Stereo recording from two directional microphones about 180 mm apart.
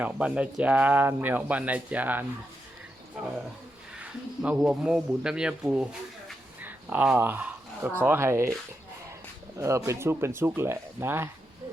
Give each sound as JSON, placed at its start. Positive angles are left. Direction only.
{"t": 0.0, "sound": "speech", "side_deg": -5}
{"t": 9.6, "sound": "speech", "side_deg": -15}